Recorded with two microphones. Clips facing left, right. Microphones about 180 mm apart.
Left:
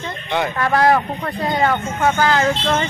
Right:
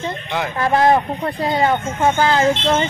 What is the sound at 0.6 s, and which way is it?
Speech, 20° right (ahead or behind).